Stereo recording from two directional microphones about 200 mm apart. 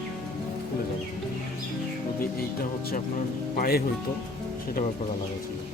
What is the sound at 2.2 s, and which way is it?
Speech, 50° left (ahead or behind).